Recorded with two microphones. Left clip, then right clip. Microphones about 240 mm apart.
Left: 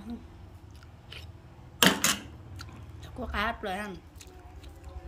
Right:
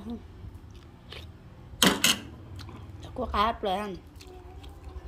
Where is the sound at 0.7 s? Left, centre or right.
Centre.